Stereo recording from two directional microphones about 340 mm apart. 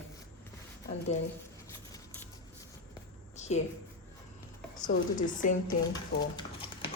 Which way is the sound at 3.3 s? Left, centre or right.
Centre.